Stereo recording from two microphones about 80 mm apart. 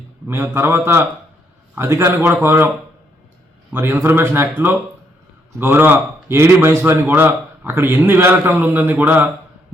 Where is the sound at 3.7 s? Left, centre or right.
Right.